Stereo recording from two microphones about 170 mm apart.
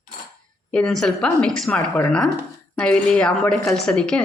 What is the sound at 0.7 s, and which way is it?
A woman's voice, 5° left (ahead or behind).